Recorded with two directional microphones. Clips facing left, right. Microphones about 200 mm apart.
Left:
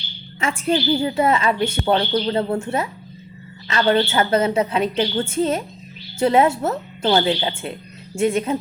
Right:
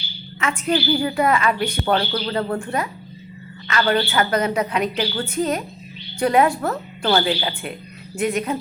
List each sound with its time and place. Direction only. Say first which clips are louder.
0.3 s a woman's voice: left 1 dB; 30° left (ahead or behind)